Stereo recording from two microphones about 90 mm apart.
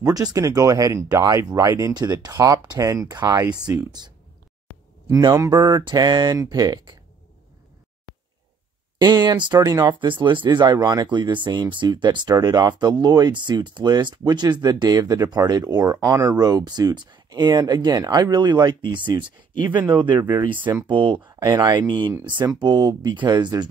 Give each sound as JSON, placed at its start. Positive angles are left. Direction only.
{"t": 0.0, "sound": "speech", "side_deg": -45}
{"t": 5.1, "sound": "speech", "side_deg": -40}
{"t": 5.9, "sound": "speech", "side_deg": -50}
{"t": 8.9, "sound": "speech", "side_deg": -55}
{"t": 9.8, "sound": "speech", "side_deg": -65}
{"t": 19.8, "sound": "speech", "side_deg": -20}
{"t": 20.9, "sound": "speech", "side_deg": -65}
{"t": 21.5, "sound": "speech", "side_deg": -45}